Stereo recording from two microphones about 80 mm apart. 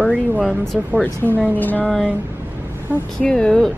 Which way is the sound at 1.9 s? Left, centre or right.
Centre.